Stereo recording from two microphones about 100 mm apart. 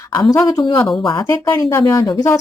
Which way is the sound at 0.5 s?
50° left (ahead or behind).